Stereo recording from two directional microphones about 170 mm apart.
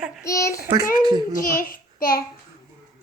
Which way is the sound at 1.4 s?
55° left (ahead or behind).